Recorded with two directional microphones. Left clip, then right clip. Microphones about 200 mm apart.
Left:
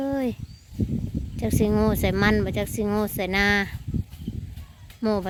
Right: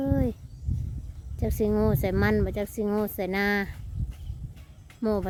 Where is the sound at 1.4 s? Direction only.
15° right (ahead or behind).